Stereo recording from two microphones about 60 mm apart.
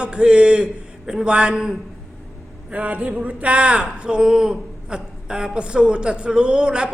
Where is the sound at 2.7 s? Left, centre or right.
Right.